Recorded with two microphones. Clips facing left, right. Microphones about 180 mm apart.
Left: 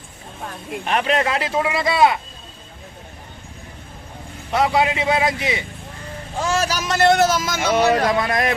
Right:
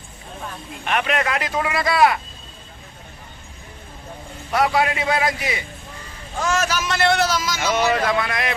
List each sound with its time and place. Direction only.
0.9 s speech: 30° left (ahead or behind)
4.5 s speech: 20° left (ahead or behind); by 7.6 s 50° left (ahead or behind)
7.6 s speech: 30° left (ahead or behind)